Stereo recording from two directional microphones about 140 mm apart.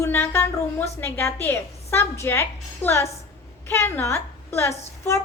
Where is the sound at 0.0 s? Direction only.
15° left (ahead or behind).